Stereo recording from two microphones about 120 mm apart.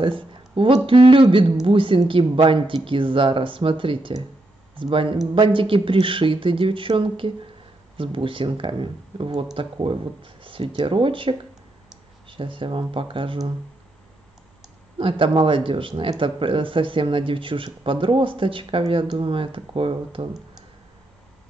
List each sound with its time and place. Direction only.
0.8 s speech: 45° right (ahead or behind)
15.0 s speech: 45° right (ahead or behind)